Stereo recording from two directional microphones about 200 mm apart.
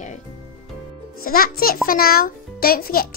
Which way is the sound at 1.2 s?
50° left (ahead or behind).